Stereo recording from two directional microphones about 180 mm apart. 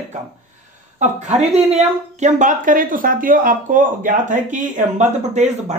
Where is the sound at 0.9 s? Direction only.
40° right (ahead or behind).